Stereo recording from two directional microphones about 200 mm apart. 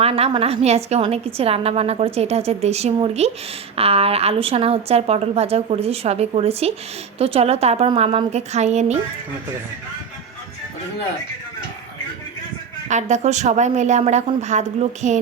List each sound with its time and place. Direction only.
0.0 s a woman's voice: 30° right (ahead or behind)
12.9 s a woman's voice: 35° right (ahead or behind)